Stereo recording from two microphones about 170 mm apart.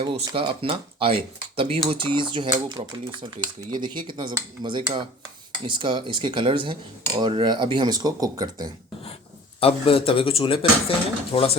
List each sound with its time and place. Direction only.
0.0 s speech: 30° right (ahead or behind)
9.6 s speech: 35° left (ahead or behind)